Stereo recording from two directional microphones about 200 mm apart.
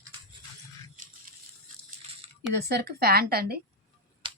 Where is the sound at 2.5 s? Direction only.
55° right (ahead or behind).